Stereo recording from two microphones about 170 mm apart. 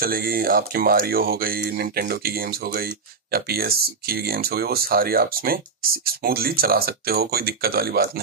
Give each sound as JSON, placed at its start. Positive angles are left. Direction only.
{"t": 0.0, "sound": "speech", "side_deg": -60}